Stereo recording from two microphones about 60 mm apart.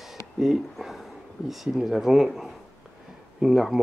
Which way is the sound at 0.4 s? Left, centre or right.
Centre.